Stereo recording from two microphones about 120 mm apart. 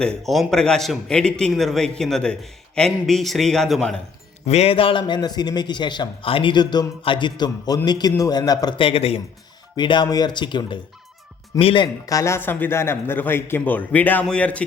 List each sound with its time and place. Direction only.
0.3 s a man's voice: centre (ahead or behind)
4.4 s a man's voice: 60° left (ahead or behind); by 8.7 s 35° left (ahead or behind)
8.8 s speech: 55° left (ahead or behind)
9.7 s a man's voice: 40° left (ahead or behind)
12.0 s a man's voice: 25° left (ahead or behind); by 14.6 s 10° left (ahead or behind)